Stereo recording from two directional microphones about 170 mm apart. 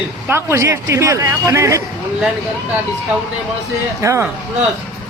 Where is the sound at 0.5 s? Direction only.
15° right (ahead or behind).